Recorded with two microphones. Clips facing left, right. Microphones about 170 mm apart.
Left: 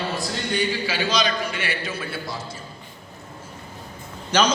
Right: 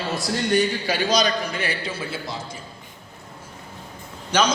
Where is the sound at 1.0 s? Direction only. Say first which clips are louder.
Right 3 dB; 40° right (ahead or behind); by 2.6 s 25° right (ahead or behind).